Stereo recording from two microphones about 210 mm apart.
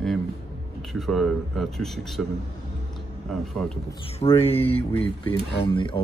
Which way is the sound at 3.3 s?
Centre (ahead or behind).